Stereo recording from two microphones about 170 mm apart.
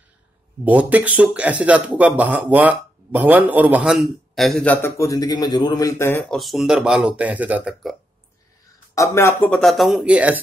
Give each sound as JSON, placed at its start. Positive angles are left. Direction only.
{"t": 0.7, "sound": "speech", "side_deg": -10}
{"t": 4.8, "sound": "speech", "side_deg": 20}
{"t": 6.3, "sound": "speech", "side_deg": 0}
{"t": 8.9, "sound": "speech", "side_deg": 15}